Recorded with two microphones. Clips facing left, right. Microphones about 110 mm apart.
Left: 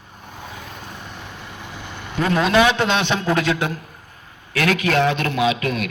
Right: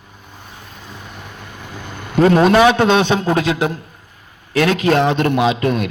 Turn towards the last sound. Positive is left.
turn(degrees=-30)  # may be behind; listen again after turning